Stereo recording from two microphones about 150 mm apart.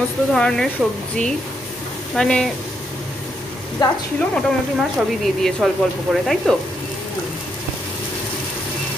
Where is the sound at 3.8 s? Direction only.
25° left (ahead or behind).